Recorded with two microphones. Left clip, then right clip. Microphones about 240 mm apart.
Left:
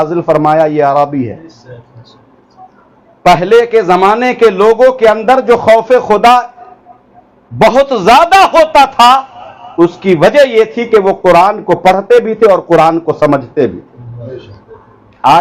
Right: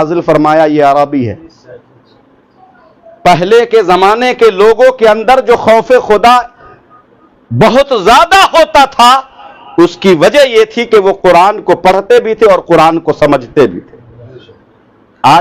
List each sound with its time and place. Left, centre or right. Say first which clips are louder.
0.0 s a man's voice: right 1 dB; right
3.2 s a man's voice: even; right
7.6 s a man's voice: right 1 dB; right